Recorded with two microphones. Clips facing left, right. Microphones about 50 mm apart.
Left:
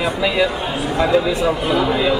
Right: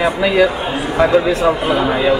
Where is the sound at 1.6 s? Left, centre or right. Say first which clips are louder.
Right 2 dB; centre.